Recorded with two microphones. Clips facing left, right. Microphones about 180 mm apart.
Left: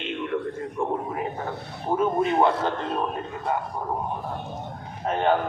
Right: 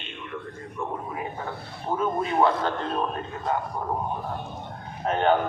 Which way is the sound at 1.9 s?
25° left (ahead or behind).